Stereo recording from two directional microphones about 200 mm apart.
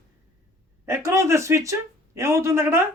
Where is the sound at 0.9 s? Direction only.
15° right (ahead or behind).